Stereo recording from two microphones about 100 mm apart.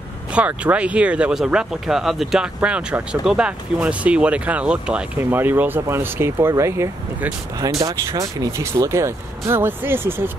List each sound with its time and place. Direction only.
0.3 s speech: 15° right (ahead or behind)